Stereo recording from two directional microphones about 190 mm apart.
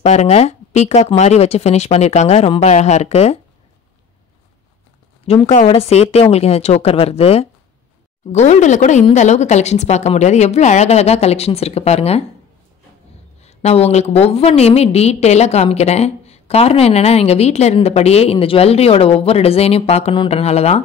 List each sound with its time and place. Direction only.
0.0 s a woman's voice: 35° left (ahead or behind)
5.2 s a woman's voice: 30° left (ahead or behind)
13.4 s a woman's voice: 35° left (ahead or behind)